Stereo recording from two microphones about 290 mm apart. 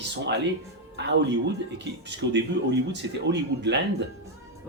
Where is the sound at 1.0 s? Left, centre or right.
Right.